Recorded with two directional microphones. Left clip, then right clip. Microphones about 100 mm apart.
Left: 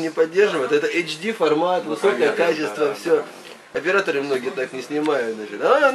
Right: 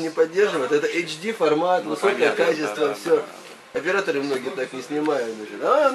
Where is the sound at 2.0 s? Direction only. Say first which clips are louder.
Left 2 dB; 25° right (ahead or behind).